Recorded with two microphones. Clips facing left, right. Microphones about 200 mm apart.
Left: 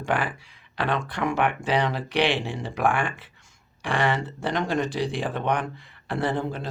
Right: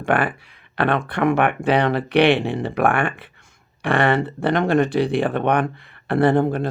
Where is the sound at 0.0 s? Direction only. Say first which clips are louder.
Right 6 dB; 60° right (ahead or behind).